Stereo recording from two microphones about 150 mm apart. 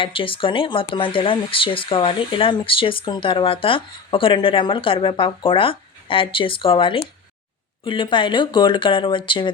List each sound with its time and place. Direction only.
0.0 s speech: 35° left (ahead or behind)